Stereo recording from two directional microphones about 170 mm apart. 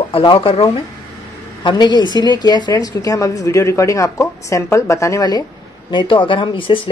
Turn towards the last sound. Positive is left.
turn(degrees=30)  # may be behind; listen again after turning